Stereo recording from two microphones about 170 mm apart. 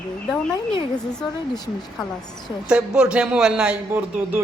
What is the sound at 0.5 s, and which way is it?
Speech, 30° left (ahead or behind).